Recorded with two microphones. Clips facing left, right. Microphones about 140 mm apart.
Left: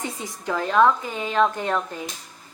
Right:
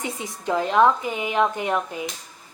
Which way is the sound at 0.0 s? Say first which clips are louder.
Right 1 dB; 20° right (ahead or behind).